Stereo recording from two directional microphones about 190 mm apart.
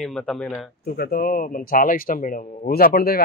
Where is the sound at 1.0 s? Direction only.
50° left (ahead or behind).